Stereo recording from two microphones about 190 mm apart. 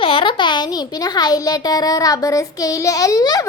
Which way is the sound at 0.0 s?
30° left (ahead or behind).